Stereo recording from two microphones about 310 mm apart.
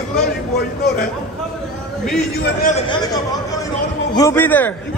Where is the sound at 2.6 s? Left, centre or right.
Left; by 4.7 s centre.